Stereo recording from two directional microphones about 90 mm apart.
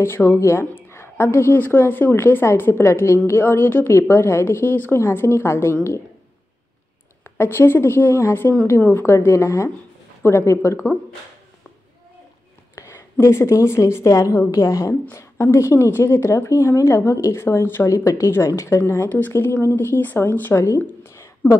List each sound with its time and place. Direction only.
0.0 s speech: 30° left (ahead or behind)
7.3 s speech: 25° left (ahead or behind)
12.7 s a woman's voice: 35° left (ahead or behind)